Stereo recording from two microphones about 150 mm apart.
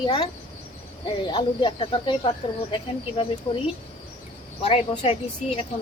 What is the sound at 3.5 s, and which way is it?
Speech, 40° left (ahead or behind).